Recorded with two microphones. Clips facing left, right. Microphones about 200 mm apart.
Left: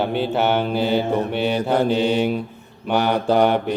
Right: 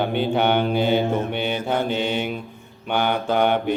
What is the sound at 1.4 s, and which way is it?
Mantra, 35° left (ahead or behind).